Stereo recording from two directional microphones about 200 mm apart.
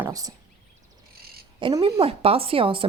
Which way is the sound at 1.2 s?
50° right (ahead or behind).